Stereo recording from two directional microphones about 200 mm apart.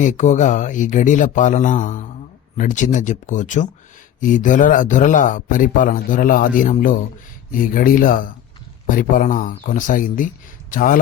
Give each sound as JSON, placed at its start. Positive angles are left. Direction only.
{"t": 0.0, "sound": "a man's voice", "side_deg": 35}